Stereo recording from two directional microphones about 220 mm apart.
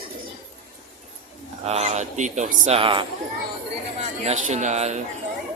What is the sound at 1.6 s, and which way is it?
A man's voice, 30° right (ahead or behind).